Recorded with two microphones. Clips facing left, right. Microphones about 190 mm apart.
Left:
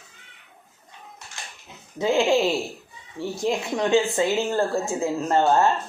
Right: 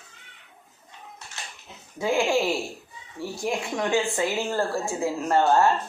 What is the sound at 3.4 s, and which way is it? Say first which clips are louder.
Speech: left 3 dB; 20° left (ahead or behind).